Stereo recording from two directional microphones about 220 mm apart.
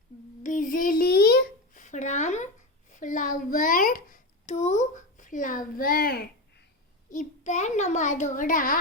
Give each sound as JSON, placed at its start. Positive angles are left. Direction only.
{"t": 0.4, "sound": "babbling", "side_deg": 35}
{"t": 2.9, "sound": "a sound", "side_deg": 35}
{"t": 7.1, "sound": "a child's voice", "side_deg": 35}